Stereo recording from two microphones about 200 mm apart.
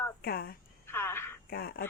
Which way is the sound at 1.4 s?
50° left (ahead or behind).